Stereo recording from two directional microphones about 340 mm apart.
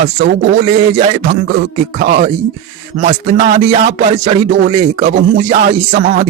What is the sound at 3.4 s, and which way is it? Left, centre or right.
Speech, right.